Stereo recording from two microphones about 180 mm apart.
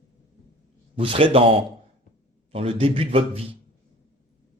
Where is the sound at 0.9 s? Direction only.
30° right (ahead or behind).